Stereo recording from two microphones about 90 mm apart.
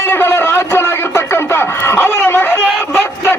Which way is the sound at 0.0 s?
25° left (ahead or behind).